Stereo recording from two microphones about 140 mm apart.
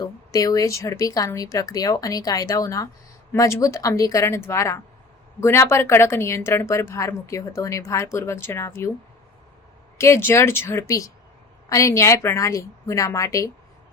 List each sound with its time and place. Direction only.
0.0 s a woman's voice: 25° left (ahead or behind)
10.0 s a woman's voice: 20° left (ahead or behind)